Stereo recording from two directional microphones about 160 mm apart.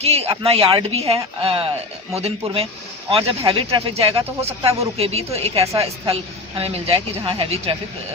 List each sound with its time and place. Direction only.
0.0 s speech: 40° right (ahead or behind)